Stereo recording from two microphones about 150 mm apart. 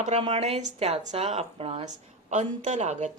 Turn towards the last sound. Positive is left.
turn(degrees=-55)  # may be behind; listen again after turning